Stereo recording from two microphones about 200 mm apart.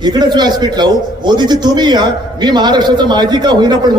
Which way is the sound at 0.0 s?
20° right (ahead or behind).